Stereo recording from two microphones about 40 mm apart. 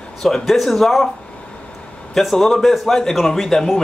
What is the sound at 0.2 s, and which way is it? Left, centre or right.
Speech, centre.